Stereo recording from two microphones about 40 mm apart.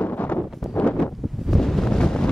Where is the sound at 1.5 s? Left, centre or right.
Centre.